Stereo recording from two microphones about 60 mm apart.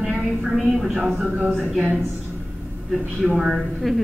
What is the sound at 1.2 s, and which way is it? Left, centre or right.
Speech, right.